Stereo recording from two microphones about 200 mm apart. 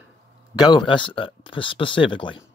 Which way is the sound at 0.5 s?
25° left (ahead or behind).